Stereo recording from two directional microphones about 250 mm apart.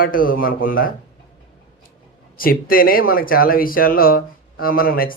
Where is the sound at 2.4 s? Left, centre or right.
Left.